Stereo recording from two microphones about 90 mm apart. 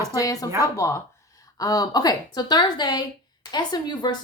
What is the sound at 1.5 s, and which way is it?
A woman's voice, 40° left (ahead or behind).